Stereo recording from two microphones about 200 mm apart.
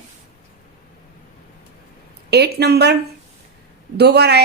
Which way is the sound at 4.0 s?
55° right (ahead or behind).